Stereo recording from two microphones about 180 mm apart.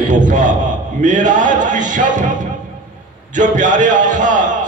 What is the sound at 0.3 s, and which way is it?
A man's voice, 45° right (ahead or behind).